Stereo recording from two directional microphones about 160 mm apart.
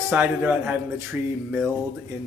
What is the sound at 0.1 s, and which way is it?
Mantra, 10° right (ahead or behind).